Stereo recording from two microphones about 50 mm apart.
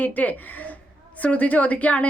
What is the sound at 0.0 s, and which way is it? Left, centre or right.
A woman's voice, left.